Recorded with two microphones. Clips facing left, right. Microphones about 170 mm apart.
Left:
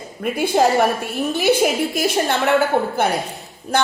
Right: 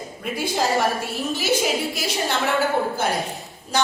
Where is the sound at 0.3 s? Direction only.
60° left (ahead or behind).